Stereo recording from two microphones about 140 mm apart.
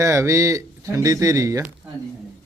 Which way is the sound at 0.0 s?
25° right (ahead or behind).